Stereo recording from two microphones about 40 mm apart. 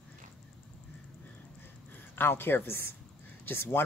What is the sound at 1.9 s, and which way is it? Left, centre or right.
Speech, left.